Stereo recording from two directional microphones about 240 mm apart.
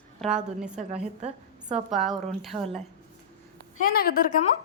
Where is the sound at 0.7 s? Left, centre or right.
Right.